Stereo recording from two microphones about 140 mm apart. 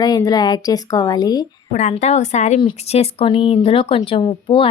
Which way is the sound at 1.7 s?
55° left (ahead or behind).